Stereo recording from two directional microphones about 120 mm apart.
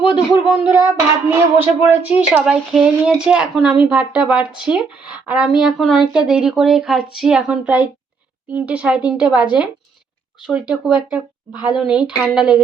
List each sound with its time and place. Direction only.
0.4 s a woman's voice: 10° right (ahead or behind)
11.5 s speech: 40° left (ahead or behind)
11.8 s speech: 10° right (ahead or behind)